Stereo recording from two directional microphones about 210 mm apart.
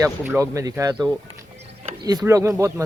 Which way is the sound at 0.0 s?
15° right (ahead or behind).